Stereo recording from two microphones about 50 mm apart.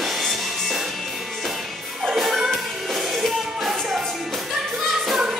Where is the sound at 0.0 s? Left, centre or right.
Centre.